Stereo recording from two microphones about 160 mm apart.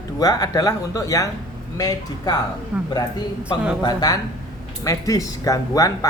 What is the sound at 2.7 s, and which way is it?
Speech, 10° right (ahead or behind).